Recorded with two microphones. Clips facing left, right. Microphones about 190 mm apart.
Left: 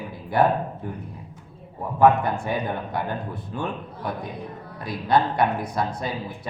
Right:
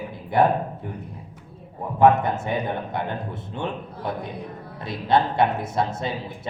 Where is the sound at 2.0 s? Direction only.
20° right (ahead or behind).